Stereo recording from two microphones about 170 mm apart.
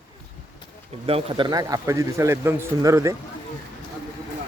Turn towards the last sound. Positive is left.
turn(degrees=-20)  # may be behind; listen again after turning